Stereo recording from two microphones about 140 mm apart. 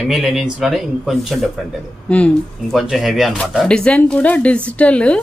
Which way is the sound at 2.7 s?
Centre (ahead or behind).